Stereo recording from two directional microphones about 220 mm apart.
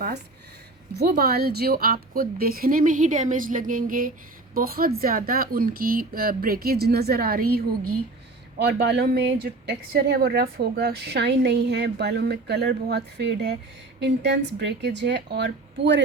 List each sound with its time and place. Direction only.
0.9 s a woman's voice: 45° right (ahead or behind)
8.5 s speech: 50° right (ahead or behind)